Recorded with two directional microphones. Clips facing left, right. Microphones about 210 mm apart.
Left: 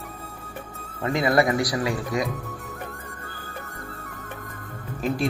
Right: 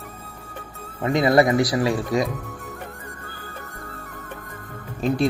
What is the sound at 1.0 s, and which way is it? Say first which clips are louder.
Speech: right 4 dB; 20° right (ahead or behind).